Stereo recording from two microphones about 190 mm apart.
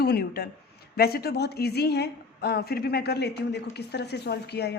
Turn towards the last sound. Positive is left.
turn(degrees=60)  # may be behind; listen again after turning